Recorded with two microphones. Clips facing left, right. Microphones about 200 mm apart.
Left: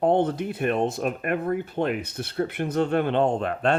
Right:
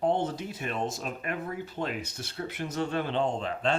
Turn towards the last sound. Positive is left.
turn(degrees=60)  # may be behind; listen again after turning